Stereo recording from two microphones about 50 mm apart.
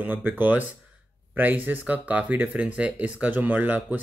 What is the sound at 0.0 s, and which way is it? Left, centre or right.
Speech, right.